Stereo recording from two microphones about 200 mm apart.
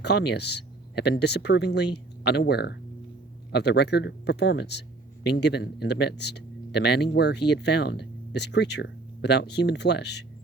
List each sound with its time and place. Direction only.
0.0 s speech: 55° left (ahead or behind)